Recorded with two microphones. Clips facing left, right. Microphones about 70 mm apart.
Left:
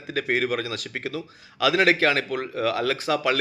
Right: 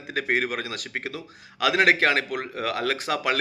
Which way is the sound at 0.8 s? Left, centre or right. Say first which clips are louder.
Left 1 dB; right.